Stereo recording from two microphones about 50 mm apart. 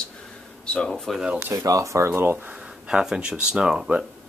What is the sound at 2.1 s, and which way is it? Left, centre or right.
Speech, right.